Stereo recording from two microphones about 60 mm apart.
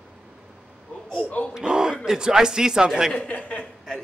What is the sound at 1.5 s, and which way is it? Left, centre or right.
Speech, centre.